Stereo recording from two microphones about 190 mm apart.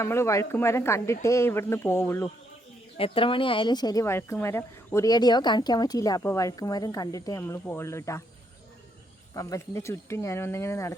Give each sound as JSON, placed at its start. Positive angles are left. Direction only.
{"t": 0.0, "sound": "speech", "side_deg": 15}
{"t": 3.0, "sound": "speech", "side_deg": 30}
{"t": 9.3, "sound": "speech", "side_deg": 15}